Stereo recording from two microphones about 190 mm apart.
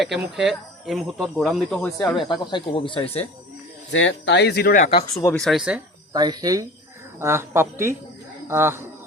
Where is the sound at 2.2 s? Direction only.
25° left (ahead or behind).